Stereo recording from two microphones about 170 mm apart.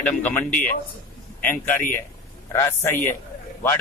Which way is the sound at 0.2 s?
10° left (ahead or behind).